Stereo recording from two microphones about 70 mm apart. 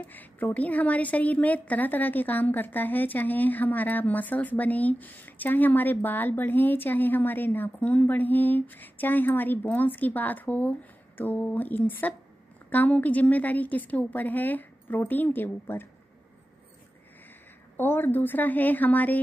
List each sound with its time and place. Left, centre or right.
0.0 s a woman's voice: left
17.7 s a woman's voice: left